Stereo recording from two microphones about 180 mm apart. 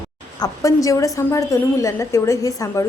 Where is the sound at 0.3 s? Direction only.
20° left (ahead or behind).